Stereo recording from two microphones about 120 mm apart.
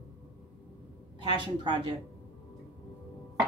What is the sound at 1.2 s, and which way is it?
Speech, 40° right (ahead or behind).